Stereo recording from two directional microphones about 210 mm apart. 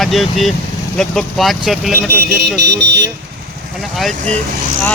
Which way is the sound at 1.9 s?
50° right (ahead or behind).